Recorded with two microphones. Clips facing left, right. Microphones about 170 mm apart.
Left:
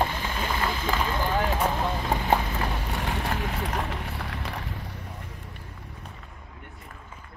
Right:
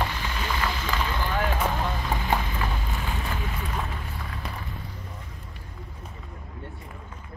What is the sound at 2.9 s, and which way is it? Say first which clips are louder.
Boat: left 3 dB; 75° left (ahead or behind).